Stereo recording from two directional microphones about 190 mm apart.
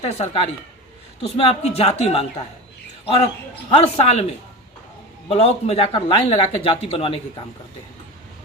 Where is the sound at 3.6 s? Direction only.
30° left (ahead or behind).